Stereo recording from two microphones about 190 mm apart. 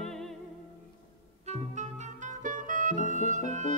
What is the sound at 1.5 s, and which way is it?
Music, 40° right (ahead or behind).